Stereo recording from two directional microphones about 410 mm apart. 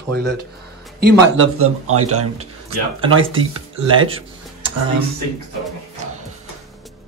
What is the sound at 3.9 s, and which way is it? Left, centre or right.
Music, centre.